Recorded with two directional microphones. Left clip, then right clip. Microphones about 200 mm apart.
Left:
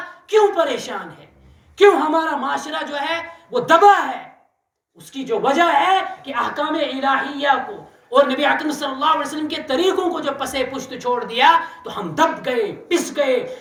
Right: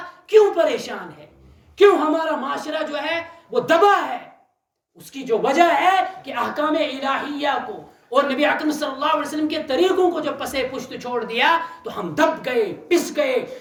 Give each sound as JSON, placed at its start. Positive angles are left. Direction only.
{"t": 0.3, "sound": "a sound", "side_deg": 0}
{"t": 1.8, "sound": "a woman's voice", "side_deg": 0}
{"t": 5.1, "sound": "a woman's voice", "side_deg": -5}